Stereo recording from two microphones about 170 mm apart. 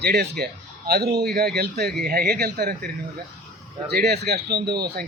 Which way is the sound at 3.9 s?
70° right (ahead or behind).